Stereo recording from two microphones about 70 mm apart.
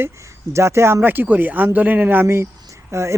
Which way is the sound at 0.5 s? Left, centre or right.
Right.